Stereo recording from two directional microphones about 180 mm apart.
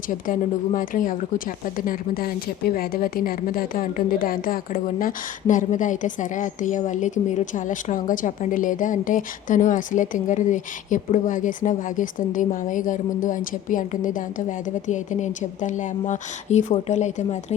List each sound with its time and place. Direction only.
0.1 s a woman's voice: 50° left (ahead or behind)